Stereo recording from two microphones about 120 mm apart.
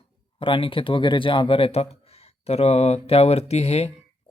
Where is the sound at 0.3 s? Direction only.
50° left (ahead or behind).